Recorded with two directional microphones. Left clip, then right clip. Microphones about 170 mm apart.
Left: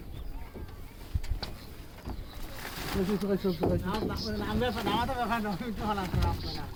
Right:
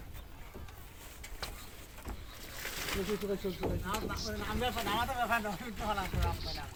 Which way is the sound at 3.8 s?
25° right (ahead or behind).